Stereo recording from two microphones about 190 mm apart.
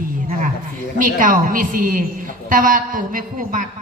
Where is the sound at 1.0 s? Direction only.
45° right (ahead or behind).